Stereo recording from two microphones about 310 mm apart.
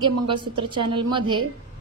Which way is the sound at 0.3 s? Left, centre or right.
Centre.